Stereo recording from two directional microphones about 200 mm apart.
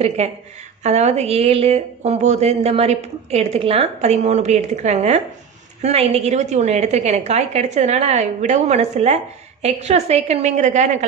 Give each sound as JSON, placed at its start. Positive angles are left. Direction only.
{"t": 0.2, "sound": "a woman's voice", "side_deg": -35}